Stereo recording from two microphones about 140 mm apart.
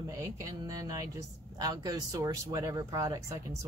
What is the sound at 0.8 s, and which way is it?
Speech, 25° right (ahead or behind).